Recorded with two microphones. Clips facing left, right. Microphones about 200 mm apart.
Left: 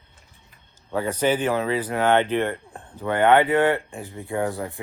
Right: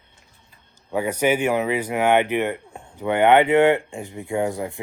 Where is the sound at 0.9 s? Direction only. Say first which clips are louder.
Right 1 dB; 10° right (ahead or behind).